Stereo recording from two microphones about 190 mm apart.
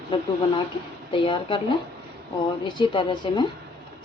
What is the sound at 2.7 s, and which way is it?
Speech, 25° left (ahead or behind).